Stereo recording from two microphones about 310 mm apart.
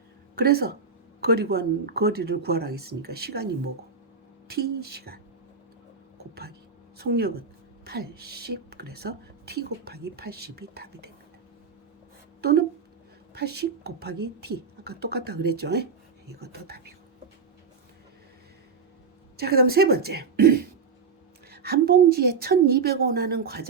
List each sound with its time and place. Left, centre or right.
0.3 s a woman's voice: right
7.1 s a woman's voice: right
12.4 s a woman's voice: right
19.4 s a woman's voice: right